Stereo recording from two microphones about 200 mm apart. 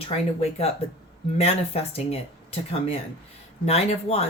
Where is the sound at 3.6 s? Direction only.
30° left (ahead or behind).